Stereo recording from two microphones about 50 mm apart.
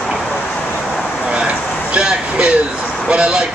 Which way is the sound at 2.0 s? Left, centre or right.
Centre.